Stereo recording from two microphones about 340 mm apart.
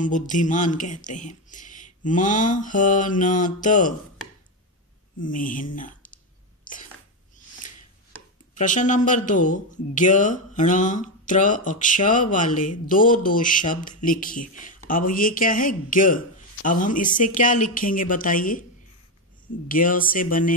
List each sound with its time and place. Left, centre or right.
0.0 s speech: left
5.2 s speech: left
8.5 s speech: left
19.7 s speech: left